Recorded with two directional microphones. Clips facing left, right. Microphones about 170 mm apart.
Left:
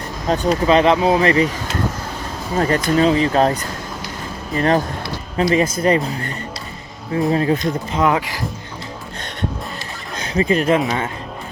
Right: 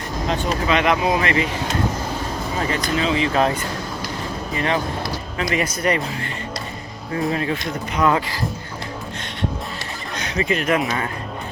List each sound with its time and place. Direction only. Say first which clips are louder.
0.3 s speech: left 6 dB; 35° left (ahead or behind)
2.6 s speech: left 7 dB; 45° left (ahead or behind)
5.4 s speech: left 6 dB; 30° left (ahead or behind)
8.0 s speech: left 1 dB; 15° left (ahead or behind)
10.3 s speech: left 5 dB; 35° left (ahead or behind)
10.8 s speech: left 3 dB; 20° left (ahead or behind)